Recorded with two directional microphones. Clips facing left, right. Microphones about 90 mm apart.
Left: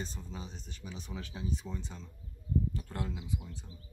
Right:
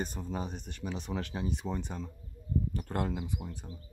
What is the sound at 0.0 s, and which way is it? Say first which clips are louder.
Speech: right 7 dB; 55° right (ahead or behind).